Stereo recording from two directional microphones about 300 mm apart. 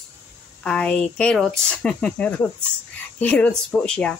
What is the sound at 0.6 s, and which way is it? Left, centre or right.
Speech, centre.